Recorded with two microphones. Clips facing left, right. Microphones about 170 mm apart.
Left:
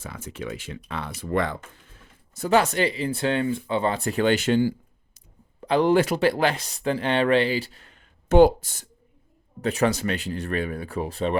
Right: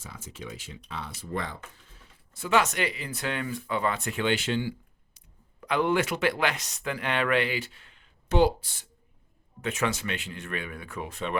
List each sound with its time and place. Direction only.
0.0 s speech: 60° left (ahead or behind)
2.3 s speech: 40° left (ahead or behind)
5.5 s speech: 30° left (ahead or behind)